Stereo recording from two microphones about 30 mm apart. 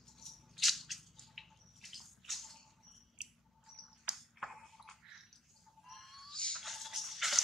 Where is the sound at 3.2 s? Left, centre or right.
Right.